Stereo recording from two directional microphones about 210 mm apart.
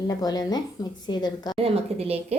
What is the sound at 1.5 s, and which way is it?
Speech, 30° right (ahead or behind).